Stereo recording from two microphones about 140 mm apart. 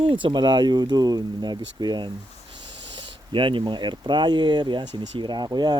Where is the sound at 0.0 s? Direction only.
40° right (ahead or behind).